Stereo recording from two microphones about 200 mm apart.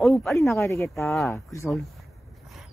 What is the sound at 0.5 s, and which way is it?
Speech, 15° left (ahead or behind).